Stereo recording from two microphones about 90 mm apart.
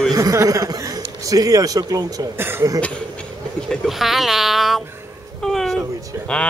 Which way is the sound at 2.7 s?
10° left (ahead or behind).